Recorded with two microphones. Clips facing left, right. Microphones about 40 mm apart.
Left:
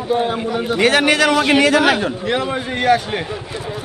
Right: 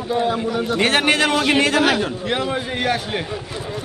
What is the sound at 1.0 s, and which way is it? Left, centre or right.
Speech, right.